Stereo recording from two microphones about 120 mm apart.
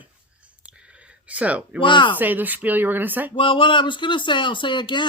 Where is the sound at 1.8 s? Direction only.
40° left (ahead or behind).